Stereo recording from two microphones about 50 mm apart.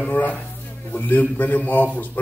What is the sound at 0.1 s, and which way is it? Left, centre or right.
A man's voice, left.